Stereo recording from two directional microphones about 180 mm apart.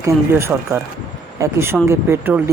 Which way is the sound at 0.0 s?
15° right (ahead or behind).